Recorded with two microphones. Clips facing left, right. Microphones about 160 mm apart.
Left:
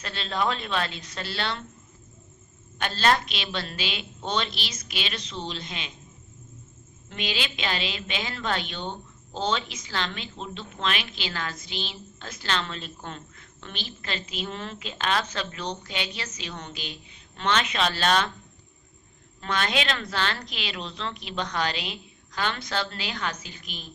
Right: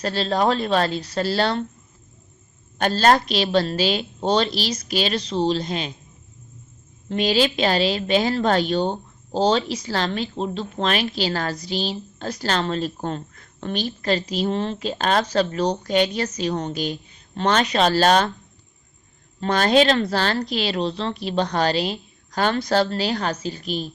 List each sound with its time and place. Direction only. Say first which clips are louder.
0.0 s a woman's voice: right 8 dB; 35° right (ahead or behind)
2.7 s a woman's voice: right 7 dB; 40° right (ahead or behind)
7.1 s a woman's voice: right 12 dB; 35° right (ahead or behind)
19.4 s a woman's voice: right 10 dB; 35° right (ahead or behind)